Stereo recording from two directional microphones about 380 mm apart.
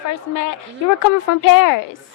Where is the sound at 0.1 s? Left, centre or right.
Left.